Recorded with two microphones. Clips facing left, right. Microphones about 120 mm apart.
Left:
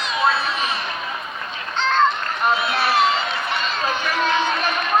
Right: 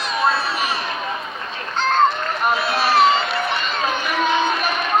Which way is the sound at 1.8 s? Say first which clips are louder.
Right 1 dB; 45° right (ahead or behind).